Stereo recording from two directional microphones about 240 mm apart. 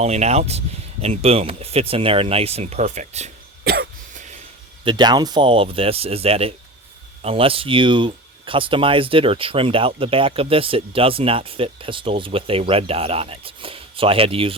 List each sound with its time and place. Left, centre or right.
0.0 s speech: right
3.6 s cough: right
4.9 s speech: centre